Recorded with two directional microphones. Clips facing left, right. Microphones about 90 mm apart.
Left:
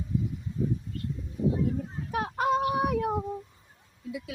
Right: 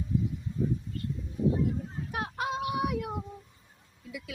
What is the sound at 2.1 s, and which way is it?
Child singing, 45° left (ahead or behind).